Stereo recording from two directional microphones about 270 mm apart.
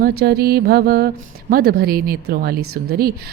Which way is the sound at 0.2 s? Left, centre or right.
Right.